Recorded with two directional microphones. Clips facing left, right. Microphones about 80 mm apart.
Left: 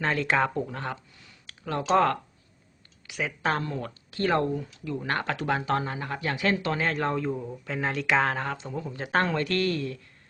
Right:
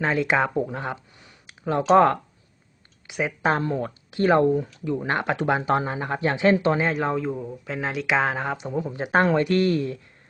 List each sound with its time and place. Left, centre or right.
0.0 s speech: centre